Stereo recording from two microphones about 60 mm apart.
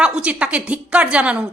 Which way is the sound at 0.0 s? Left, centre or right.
Centre.